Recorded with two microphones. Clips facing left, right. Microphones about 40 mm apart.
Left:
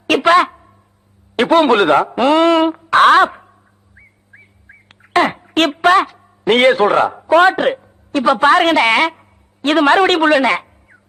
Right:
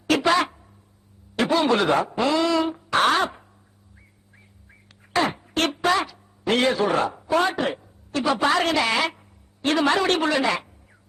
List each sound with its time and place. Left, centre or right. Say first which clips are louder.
0.1 s a sound: left 8 dB; left
1.4 s speech: left 9 dB; left
3.9 s bird: left 12 dB; left